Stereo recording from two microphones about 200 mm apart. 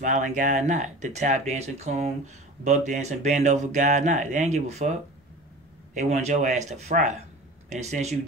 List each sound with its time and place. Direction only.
0.0 s speech: 35° right (ahead or behind)
5.9 s speech: 35° right (ahead or behind)